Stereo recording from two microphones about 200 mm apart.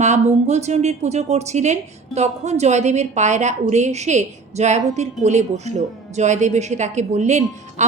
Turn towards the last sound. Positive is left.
turn(degrees=-35)  # may be behind; listen again after turning